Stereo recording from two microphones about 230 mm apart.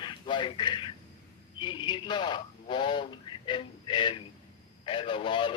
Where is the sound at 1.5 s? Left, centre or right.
Left.